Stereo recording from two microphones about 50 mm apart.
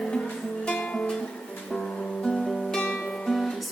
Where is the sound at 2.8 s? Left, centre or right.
Centre.